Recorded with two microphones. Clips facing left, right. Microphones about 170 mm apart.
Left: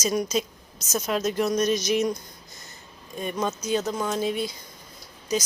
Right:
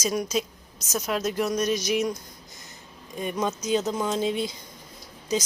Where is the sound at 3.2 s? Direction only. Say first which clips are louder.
Even; 15° right (ahead or behind).